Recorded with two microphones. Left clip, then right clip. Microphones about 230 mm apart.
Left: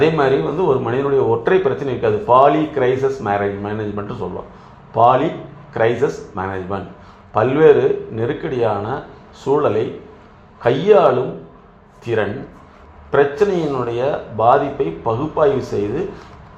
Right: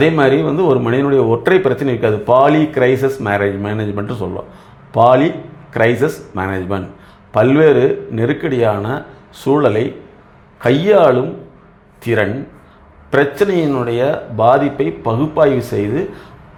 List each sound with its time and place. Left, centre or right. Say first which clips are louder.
0.0 s speech: right 3 dB; right